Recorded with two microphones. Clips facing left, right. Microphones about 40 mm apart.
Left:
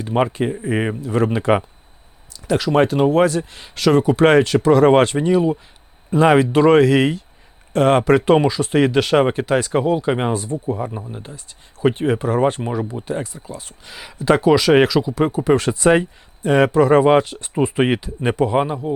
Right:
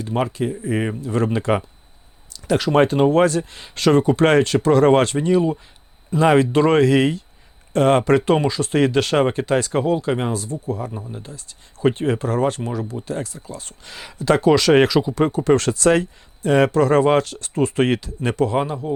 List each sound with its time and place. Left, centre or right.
0.0 s speech: centre
2.7 s speech: centre